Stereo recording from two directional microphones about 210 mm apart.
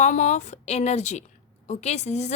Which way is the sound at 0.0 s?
35° left (ahead or behind).